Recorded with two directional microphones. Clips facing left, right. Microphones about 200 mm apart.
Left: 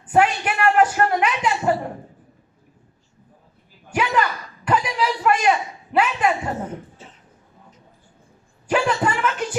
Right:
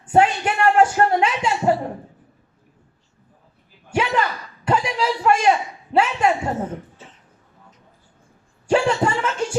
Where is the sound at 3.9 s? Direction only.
25° right (ahead or behind).